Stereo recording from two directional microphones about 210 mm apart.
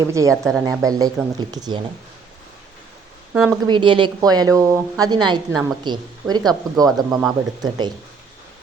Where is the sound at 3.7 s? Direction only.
25° right (ahead or behind).